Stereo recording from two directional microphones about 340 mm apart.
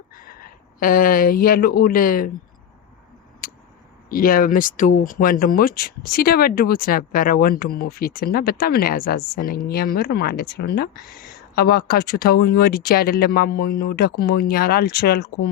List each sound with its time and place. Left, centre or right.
0.1 s speech: left
3.4 s a sound: left
4.1 s speech: left